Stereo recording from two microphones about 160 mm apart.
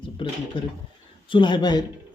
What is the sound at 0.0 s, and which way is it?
A man's voice, 30° left (ahead or behind).